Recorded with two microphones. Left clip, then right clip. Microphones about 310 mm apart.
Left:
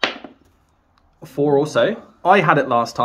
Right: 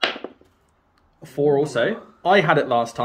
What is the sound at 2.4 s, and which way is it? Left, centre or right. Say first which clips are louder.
Speech: left 3 dB; left.